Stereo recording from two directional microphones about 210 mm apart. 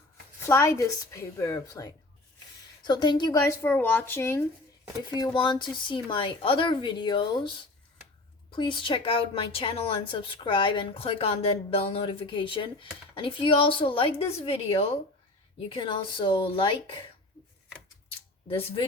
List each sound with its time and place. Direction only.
0.4 s a woman's voice: 15° left (ahead or behind)
3.7 s a woman's voice: 10° left (ahead or behind)
5.2 s a woman's voice: 20° left (ahead or behind)
18.4 s a woman's voice: 25° left (ahead or behind)